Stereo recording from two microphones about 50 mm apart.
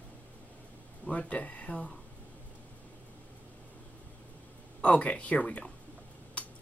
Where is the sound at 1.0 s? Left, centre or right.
Left.